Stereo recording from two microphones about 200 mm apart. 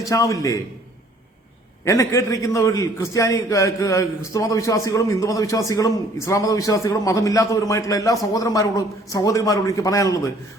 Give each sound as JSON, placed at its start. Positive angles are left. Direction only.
{"t": 0.0, "sound": "a man's voice", "side_deg": 15}
{"t": 1.8, "sound": "a man's voice", "side_deg": 15}